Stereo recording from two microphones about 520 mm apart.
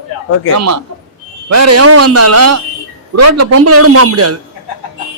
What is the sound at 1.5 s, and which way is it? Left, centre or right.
A man's voice, right.